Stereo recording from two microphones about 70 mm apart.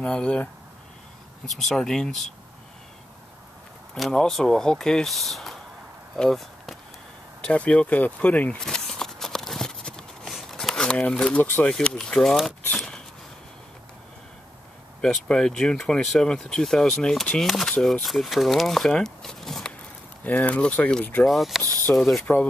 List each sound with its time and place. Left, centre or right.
0.0 s speech: centre
3.9 s speech: centre
6.1 s a sound: centre
7.4 s speech: centre
8.5 s horse: centre
10.3 s a sound: centre
11.7 s speech: centre
12.7 s a sound: centre
15.0 s speech: centre
20.2 s speech: left
21.2 s speech: centre
22.2 s speech: left